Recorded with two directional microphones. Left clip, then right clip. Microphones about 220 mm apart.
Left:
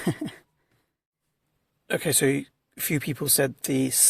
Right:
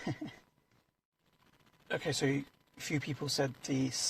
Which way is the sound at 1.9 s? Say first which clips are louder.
Left 10 dB; 40° left (ahead or behind).